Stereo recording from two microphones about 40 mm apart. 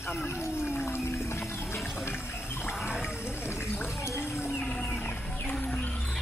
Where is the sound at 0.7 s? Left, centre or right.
Left.